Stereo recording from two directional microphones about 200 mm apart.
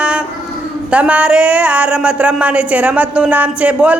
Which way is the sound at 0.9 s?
5° right (ahead or behind).